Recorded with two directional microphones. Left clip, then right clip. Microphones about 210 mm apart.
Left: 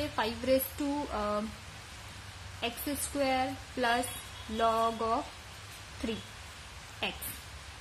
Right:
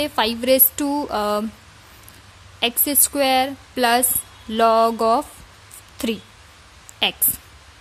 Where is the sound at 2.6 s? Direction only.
50° right (ahead or behind).